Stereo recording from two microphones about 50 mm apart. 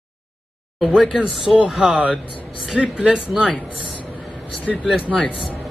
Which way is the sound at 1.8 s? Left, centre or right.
Centre.